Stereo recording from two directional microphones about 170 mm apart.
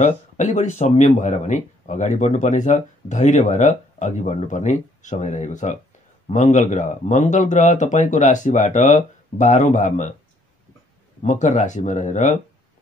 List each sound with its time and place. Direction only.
0.0 s speech: 45° left (ahead or behind)
11.2 s speech: 45° left (ahead or behind)